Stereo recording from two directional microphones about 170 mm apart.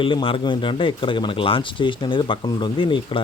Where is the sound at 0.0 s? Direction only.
30° left (ahead or behind).